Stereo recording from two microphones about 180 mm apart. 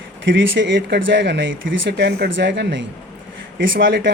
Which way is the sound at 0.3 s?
90° right.